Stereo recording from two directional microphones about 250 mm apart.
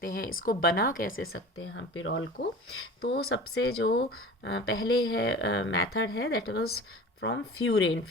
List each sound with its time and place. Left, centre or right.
0.0 s a woman's voice: left
1.1 s speech: left
3.0 s a woman's voice: left
6.1 s a woman's voice: left